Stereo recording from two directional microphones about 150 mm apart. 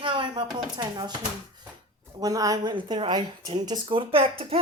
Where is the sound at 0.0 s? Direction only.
35° right (ahead or behind).